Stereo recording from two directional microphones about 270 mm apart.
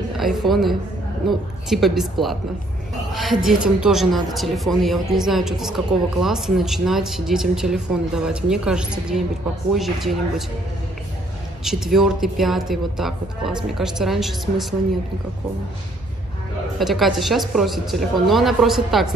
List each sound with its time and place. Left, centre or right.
0.2 s a woman's voice: centre
11.6 s a woman's voice: centre
16.7 s a woman's voice: centre